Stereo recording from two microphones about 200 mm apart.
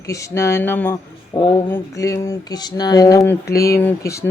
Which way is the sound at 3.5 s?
50° left (ahead or behind).